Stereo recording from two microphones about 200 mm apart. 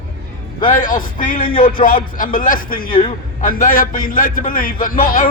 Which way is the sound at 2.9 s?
25° left (ahead or behind).